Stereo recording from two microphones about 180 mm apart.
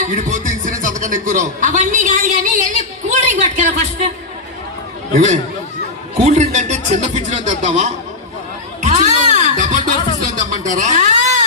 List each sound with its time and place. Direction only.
0.0 s music: 45° right (ahead or behind)
5.1 s speech: 40° right (ahead or behind)
8.8 s music: 40° right (ahead or behind)
10.6 s a sound: 40° right (ahead or behind)